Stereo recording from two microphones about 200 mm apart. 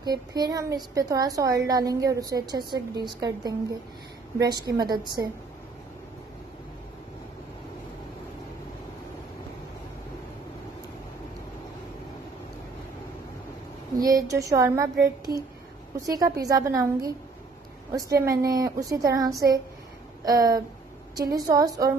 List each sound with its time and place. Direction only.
0.0 s a woman's voice: 20° right (ahead or behind)
13.9 s a woman's voice: 20° right (ahead or behind)